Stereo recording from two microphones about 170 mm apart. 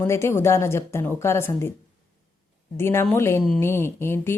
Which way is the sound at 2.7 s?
15° left (ahead or behind).